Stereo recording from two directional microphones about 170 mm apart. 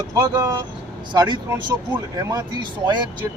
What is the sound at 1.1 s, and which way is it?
Speech, 25° right (ahead or behind).